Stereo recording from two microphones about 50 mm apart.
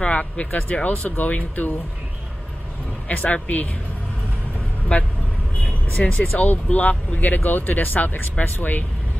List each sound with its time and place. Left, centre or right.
0.0 s speech: left
3.1 s speech: left
4.9 s speech: left